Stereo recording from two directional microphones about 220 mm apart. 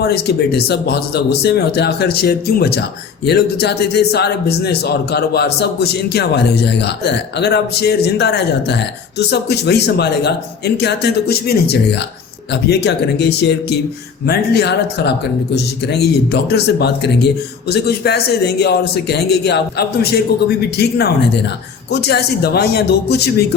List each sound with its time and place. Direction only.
0.0 s a man's voice: 45° left (ahead or behind)